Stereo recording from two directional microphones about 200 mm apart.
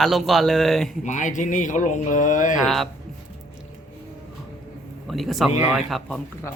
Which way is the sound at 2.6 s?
Centre (ahead or behind).